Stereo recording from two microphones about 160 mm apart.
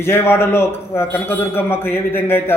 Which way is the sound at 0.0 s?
15° left (ahead or behind).